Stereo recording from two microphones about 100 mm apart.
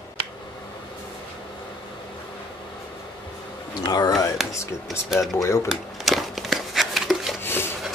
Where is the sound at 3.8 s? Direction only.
40° left (ahead or behind).